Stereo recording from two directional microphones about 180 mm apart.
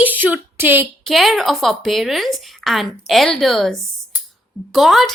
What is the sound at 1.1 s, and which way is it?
A woman's voice, centre (ahead or behind).